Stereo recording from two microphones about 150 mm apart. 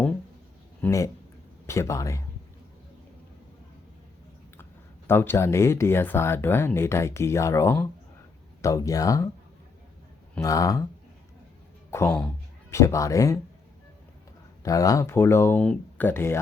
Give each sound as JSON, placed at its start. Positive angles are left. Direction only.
{"t": 0.8, "sound": "speech", "side_deg": 20}
{"t": 5.0, "sound": "speech", "side_deg": 15}
{"t": 10.4, "sound": "speech", "side_deg": 20}
{"t": 11.9, "sound": "a man's voice", "side_deg": 15}
{"t": 14.6, "sound": "speech", "side_deg": 25}